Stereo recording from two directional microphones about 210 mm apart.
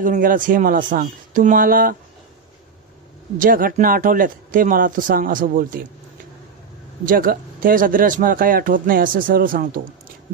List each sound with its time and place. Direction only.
0.0 s speech: 40° right (ahead or behind)
3.3 s speech: 40° right (ahead or behind)
7.1 s speech: 40° right (ahead or behind)